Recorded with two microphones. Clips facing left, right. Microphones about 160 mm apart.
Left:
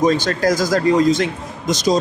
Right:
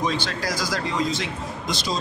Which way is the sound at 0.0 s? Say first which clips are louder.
Left 10 dB; 45° left (ahead or behind).